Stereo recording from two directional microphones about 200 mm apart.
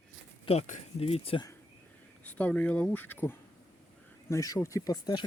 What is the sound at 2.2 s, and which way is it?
A man's voice, 10° left (ahead or behind).